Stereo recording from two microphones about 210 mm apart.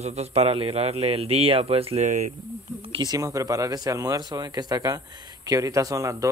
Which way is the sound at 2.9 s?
20° right (ahead or behind).